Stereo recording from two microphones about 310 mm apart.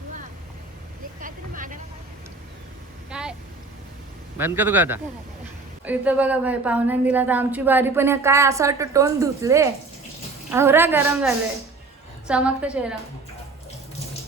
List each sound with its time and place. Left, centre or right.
1.2 s vehicle: right
3.1 s a sound: centre
4.4 s a woman's voice: centre